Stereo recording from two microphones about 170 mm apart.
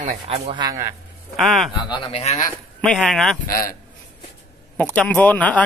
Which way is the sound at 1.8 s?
25° left (ahead or behind).